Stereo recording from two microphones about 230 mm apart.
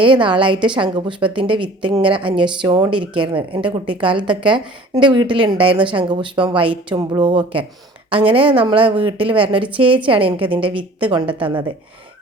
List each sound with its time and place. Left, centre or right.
0.0 s a woman's voice: right